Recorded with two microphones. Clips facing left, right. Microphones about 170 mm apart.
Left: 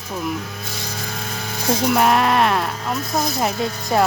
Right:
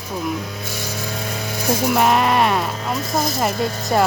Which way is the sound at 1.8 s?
Centre (ahead or behind).